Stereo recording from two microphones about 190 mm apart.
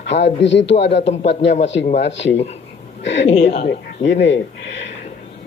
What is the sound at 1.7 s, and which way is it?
Speech, 70° left (ahead or behind).